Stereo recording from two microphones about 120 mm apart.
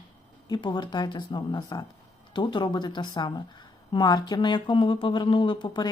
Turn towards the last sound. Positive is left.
turn(degrees=40)  # may be behind; listen again after turning